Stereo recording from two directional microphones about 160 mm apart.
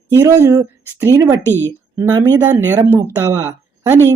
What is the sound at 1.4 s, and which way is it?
Speech, 15° left (ahead or behind).